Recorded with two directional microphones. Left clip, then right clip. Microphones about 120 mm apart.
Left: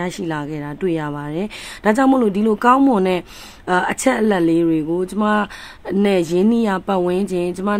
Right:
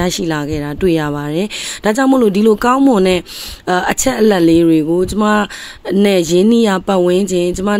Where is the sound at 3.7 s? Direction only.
35° right (ahead or behind); by 7.8 s 20° right (ahead or behind).